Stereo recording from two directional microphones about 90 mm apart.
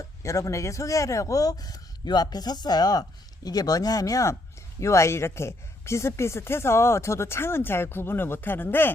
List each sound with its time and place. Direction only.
0.0 s speech: 35° left (ahead or behind)